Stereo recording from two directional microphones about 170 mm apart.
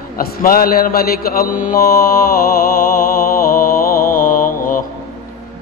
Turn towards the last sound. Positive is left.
turn(degrees=55)  # may be behind; listen again after turning